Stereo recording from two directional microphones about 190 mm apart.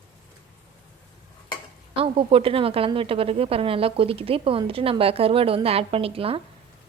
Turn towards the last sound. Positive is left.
turn(degrees=-30)  # may be behind; listen again after turning